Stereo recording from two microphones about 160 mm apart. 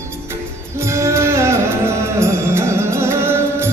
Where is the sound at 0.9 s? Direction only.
20° right (ahead or behind).